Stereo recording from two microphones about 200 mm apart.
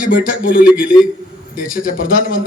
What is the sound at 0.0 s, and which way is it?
Speech, 45° left (ahead or behind).